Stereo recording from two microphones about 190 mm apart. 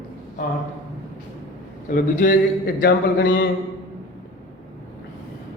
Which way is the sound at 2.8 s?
55° left (ahead or behind).